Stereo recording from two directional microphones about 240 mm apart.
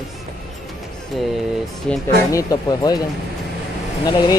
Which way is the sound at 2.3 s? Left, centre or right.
Centre.